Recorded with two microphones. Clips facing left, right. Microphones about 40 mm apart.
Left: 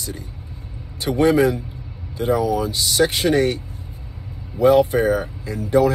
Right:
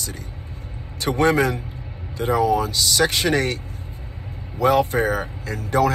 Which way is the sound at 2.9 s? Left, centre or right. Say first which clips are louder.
Left 3 dB; right.